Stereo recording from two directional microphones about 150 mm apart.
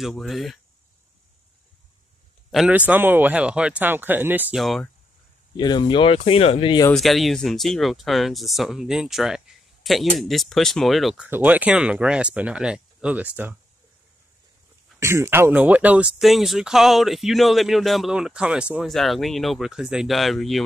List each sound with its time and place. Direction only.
0.0 s speech: centre (ahead or behind)
2.5 s speech: 5° right (ahead or behind)
4.6 s speech: centre (ahead or behind)
5.6 s speech: 30° left (ahead or behind)
6.9 s speech: centre (ahead or behind)
11.2 s speech: 10° right (ahead or behind)
15.0 s speech: 20° right (ahead or behind); by 20.6 s centre (ahead or behind)